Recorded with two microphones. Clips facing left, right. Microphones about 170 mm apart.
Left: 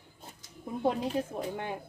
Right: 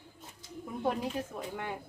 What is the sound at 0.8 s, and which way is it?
Speech, 25° left (ahead or behind).